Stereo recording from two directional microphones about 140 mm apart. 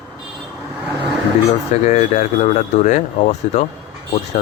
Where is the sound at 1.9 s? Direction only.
60° left (ahead or behind).